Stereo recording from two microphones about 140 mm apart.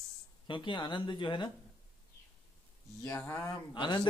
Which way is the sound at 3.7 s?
35° left (ahead or behind).